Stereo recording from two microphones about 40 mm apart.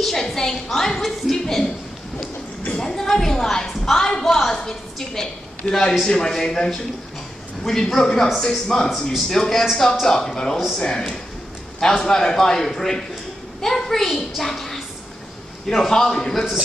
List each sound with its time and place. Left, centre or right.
0.0 s a woman's voice: centre
2.8 s a woman's voice: centre